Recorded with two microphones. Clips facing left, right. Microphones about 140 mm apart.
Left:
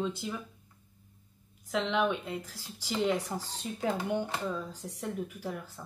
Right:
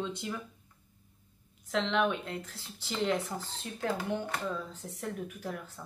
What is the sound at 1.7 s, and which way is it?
Speech, 5° left (ahead or behind).